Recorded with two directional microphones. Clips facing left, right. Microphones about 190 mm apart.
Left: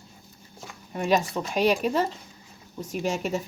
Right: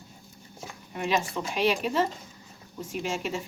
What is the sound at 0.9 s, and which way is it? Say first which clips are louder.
A woman's voice: left 4 dB; 40° left (ahead or behind).